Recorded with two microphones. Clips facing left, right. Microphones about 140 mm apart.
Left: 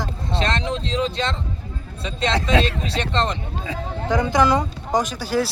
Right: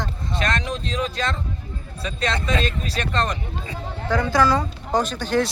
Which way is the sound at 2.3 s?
85° left.